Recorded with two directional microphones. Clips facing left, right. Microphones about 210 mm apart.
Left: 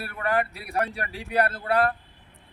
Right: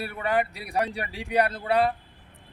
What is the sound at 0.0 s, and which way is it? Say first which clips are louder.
A man's voice: right 1 dB; 20° right (ahead or behind).